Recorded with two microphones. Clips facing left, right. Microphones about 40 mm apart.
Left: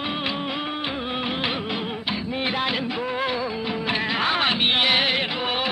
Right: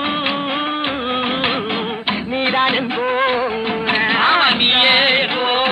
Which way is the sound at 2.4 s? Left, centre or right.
Right.